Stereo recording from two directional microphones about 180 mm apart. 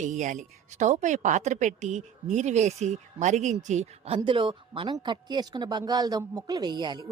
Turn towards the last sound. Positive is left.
turn(degrees=-25)  # may be behind; listen again after turning